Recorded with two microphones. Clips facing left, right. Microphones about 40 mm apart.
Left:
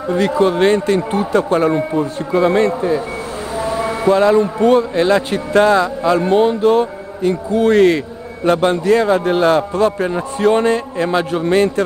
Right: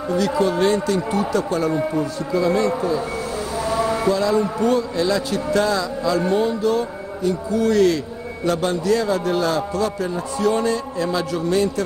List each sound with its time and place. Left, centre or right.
0.1 s a man's voice: left
3.5 s a sound: left
4.1 s a man's voice: left